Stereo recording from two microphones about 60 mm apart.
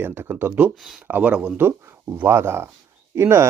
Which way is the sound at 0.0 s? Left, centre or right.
Right.